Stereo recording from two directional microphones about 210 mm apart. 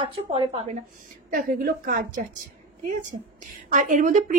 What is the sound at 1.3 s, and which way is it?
Speech, 45° right (ahead or behind).